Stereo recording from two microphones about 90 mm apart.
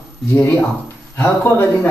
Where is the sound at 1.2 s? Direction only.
20° left (ahead or behind).